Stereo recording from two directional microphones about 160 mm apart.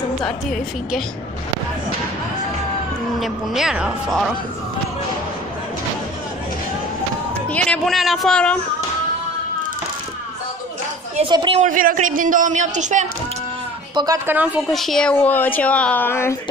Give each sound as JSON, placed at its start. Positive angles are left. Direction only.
{"t": 0.2, "sound": "speech", "side_deg": 5}
{"t": 3.2, "sound": "speech", "side_deg": -5}
{"t": 7.4, "sound": "speech", "side_deg": 10}
{"t": 11.2, "sound": "speech", "side_deg": -30}
{"t": 11.5, "sound": "speech", "side_deg": -55}
{"t": 13.9, "sound": "a woman's voice", "side_deg": -20}
{"t": 14.7, "sound": "a woman's voice", "side_deg": 0}